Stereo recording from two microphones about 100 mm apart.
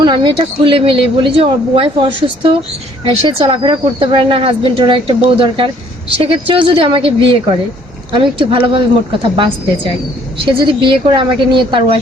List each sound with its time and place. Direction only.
0.0 s speech: 55° right (ahead or behind)